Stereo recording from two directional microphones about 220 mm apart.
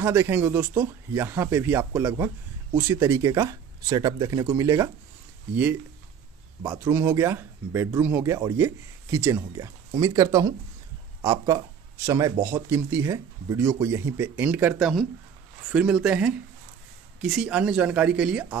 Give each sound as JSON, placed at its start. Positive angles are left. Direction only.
{"t": 0.0, "sound": "speech", "side_deg": -10}
{"t": 6.6, "sound": "speech", "side_deg": -10}